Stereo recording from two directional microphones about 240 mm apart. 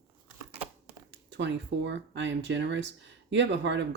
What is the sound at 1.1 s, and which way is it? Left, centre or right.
Speech, right.